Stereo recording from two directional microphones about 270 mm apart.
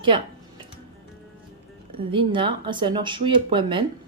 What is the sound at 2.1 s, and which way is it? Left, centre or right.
A woman's voice, centre.